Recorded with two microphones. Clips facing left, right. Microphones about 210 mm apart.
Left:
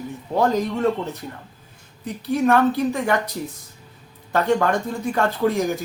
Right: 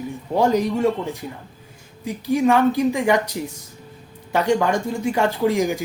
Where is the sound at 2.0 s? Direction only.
10° right (ahead or behind).